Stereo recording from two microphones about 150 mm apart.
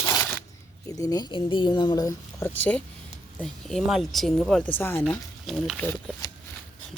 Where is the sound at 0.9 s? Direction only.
25° left (ahead or behind).